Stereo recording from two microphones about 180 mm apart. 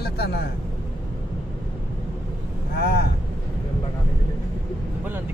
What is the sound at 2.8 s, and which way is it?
Speech, 60° left (ahead or behind).